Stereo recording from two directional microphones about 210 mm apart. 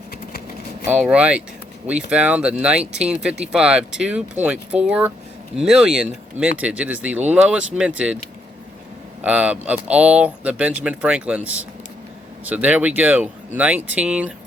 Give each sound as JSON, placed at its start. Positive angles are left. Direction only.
{"t": 0.1, "sound": "a sound", "side_deg": 45}
{"t": 0.9, "sound": "speech", "side_deg": -5}
{"t": 9.2, "sound": "speech", "side_deg": -5}